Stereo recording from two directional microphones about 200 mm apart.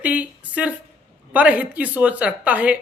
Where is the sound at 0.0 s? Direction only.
5° right (ahead or behind).